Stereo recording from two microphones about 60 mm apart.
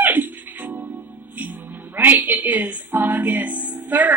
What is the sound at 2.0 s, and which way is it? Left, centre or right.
A woman's voice, right.